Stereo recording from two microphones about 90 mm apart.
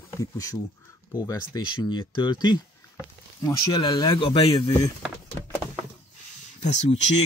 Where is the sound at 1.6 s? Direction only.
60° left (ahead or behind).